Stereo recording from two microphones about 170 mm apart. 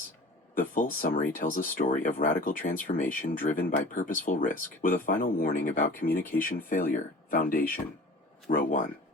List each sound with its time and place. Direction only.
0.5 s speech: 55° left (ahead or behind)